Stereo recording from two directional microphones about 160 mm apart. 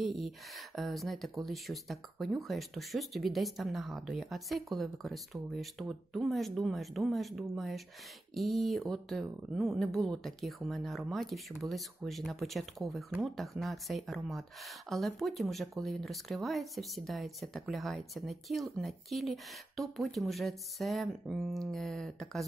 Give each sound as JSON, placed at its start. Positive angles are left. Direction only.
{"t": 0.0, "sound": "speech", "side_deg": 0}